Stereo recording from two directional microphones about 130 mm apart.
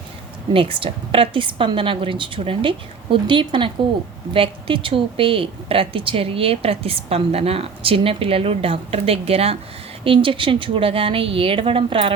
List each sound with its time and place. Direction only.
0.5 s a woman's voice: 45° right (ahead or behind)